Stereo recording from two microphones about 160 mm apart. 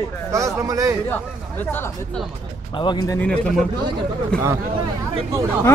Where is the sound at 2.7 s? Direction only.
30° left (ahead or behind).